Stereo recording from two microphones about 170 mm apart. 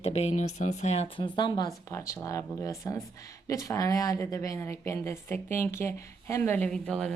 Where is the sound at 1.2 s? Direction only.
25° left (ahead or behind).